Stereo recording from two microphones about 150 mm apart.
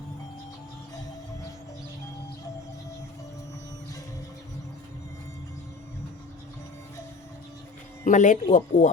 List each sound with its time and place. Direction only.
8.0 s speech: 60° left (ahead or behind)